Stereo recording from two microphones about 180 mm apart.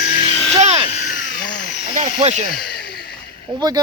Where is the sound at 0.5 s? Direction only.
35° right (ahead or behind).